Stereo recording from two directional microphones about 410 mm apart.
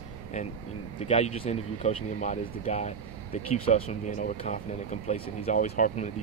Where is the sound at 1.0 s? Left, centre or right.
Centre.